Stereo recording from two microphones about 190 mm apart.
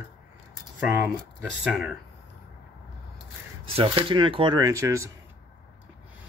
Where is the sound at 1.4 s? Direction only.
5° right (ahead or behind).